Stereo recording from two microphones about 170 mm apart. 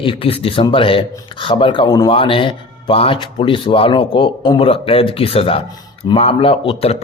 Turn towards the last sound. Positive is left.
turn(degrees=35)  # may be behind; listen again after turning